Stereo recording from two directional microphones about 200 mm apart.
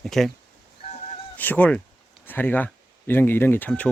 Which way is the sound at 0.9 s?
35° left (ahead or behind).